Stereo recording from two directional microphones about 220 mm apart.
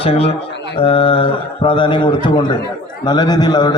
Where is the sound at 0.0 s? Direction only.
25° left (ahead or behind).